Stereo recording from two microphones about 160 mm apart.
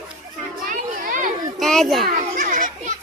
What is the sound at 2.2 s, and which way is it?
Children playing, 55° right (ahead or behind).